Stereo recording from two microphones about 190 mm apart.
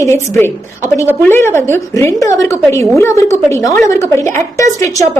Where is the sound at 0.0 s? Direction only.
15° left (ahead or behind).